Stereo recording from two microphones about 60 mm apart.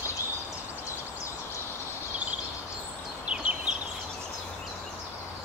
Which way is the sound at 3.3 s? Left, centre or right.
Right.